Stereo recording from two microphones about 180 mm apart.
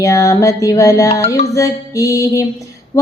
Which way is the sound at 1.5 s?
20° left (ahead or behind).